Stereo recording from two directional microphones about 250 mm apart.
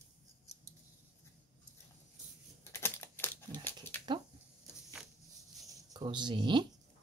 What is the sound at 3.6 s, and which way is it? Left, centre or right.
Dog, centre.